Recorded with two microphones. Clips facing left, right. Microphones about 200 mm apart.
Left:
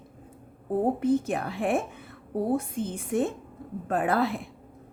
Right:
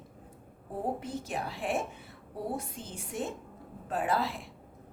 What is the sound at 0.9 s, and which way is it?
A woman's voice, 55° left (ahead or behind).